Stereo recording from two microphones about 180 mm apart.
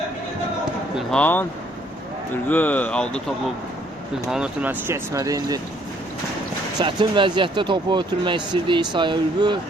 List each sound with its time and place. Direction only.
0.9 s speech: 5° left (ahead or behind)
4.3 s speech: 5° right (ahead or behind)
6.7 s speech: 25° right (ahead or behind)